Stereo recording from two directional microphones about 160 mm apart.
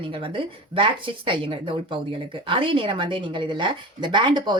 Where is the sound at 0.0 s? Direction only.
35° right (ahead or behind).